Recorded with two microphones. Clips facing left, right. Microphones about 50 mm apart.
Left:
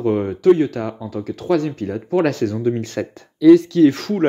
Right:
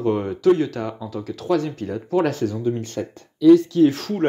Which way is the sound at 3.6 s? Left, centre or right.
Left.